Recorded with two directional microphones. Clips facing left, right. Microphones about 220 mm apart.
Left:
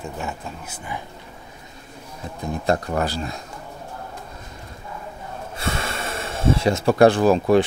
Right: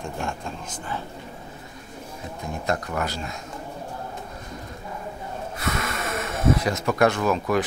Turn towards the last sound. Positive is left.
turn(degrees=30)  # may be behind; listen again after turning